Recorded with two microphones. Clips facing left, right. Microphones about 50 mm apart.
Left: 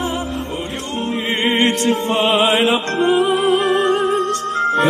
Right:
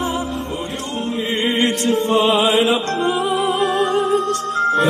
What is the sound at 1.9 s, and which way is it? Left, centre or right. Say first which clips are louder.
Music: right 1 dB; left.